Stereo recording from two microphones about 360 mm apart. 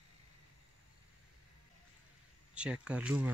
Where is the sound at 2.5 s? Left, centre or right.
Centre.